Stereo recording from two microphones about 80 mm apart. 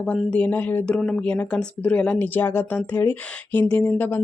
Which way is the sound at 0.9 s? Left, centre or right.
Centre.